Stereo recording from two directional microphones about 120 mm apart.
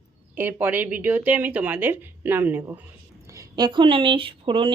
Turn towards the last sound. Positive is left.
turn(degrees=-45)  # may be behind; listen again after turning